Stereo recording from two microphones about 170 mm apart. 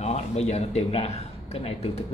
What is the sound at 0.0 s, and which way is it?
A man's voice, 40° left (ahead or behind).